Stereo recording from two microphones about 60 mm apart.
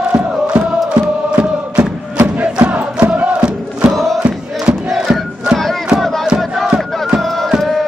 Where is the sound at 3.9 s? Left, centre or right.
Centre.